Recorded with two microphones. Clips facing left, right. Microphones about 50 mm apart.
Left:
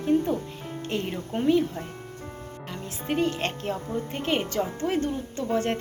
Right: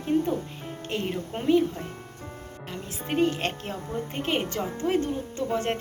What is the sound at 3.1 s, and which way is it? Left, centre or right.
Speech, centre.